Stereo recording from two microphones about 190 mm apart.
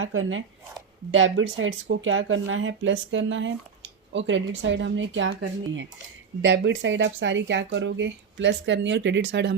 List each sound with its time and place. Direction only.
0.0 s speech: 90° right
6.4 s speech: 70° right (ahead or behind)